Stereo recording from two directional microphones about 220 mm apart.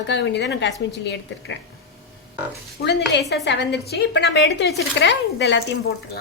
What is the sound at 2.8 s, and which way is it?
A woman's voice, 50° left (ahead or behind).